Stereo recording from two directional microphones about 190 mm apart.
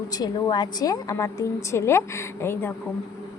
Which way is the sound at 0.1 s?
20° left (ahead or behind).